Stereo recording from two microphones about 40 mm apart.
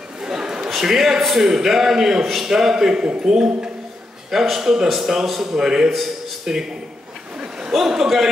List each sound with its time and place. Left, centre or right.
0.2 s a sound: centre
0.7 s a man's voice: centre
4.3 s a man's voice: centre
7.7 s a man's voice: centre